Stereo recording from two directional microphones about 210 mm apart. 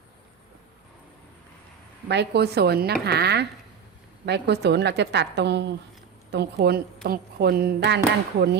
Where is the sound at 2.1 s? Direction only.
55° right (ahead or behind).